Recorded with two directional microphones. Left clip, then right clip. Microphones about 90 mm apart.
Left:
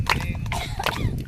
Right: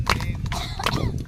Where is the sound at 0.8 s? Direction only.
20° right (ahead or behind).